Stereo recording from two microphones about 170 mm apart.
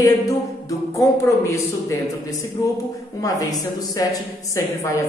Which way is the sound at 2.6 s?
20° left (ahead or behind).